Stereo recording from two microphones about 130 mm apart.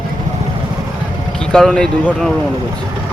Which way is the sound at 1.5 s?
5° left (ahead or behind).